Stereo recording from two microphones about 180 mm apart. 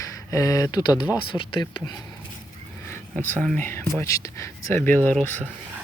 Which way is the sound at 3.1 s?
5° left (ahead or behind).